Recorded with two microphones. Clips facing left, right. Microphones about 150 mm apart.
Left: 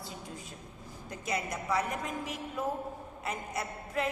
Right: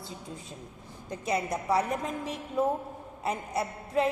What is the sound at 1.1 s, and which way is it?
A woman's voice, 30° right (ahead or behind).